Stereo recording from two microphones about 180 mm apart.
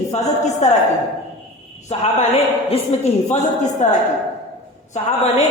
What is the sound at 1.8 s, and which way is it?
A man's voice, 35° left (ahead or behind).